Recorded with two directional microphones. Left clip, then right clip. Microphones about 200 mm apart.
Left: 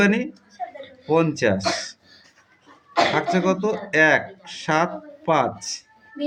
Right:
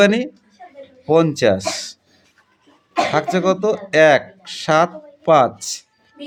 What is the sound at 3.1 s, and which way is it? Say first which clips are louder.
Speech: right 4 dB; 30° right (ahead or behind).